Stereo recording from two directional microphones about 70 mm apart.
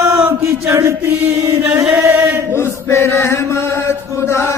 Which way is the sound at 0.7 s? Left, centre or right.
Right.